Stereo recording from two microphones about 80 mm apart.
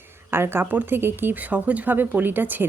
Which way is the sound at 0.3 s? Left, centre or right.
Right.